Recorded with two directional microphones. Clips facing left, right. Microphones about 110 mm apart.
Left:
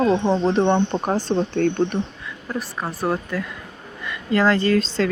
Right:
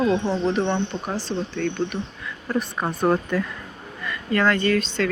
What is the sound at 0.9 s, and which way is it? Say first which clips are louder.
Speech: left 6 dB; 50° left (ahead or behind).